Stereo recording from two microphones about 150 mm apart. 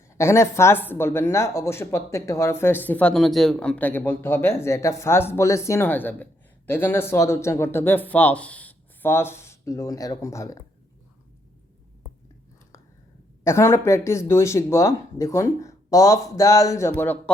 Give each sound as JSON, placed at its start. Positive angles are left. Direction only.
{"t": 0.2, "sound": "speech", "side_deg": 15}
{"t": 13.4, "sound": "speech", "side_deg": 20}